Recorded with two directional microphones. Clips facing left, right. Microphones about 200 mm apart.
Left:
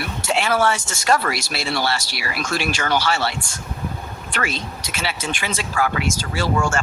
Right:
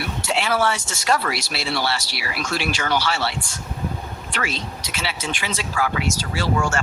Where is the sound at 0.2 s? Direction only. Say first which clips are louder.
Left 2 dB; 50° left (ahead or behind).